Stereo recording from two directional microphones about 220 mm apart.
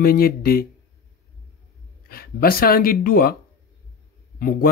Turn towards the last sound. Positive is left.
turn(degrees=40)  # may be behind; listen again after turning